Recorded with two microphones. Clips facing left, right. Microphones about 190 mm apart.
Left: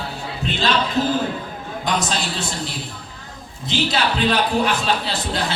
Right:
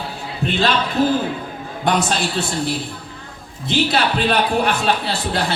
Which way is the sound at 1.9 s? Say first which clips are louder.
Right 4 dB; 60° right (ahead or behind).